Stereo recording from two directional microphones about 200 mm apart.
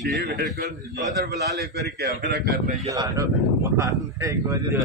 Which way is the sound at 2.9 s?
15° right (ahead or behind).